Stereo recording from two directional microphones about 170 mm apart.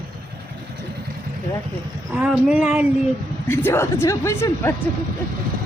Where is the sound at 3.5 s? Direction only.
15° left (ahead or behind).